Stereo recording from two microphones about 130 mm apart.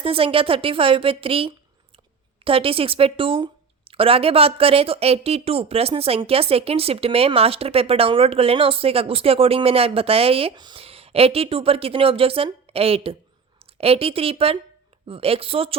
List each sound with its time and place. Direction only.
0.0 s speech: 45° right (ahead or behind)
10.8 s speech: 50° right (ahead or behind)